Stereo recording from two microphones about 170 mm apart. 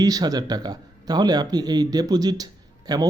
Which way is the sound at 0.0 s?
20° right (ahead or behind).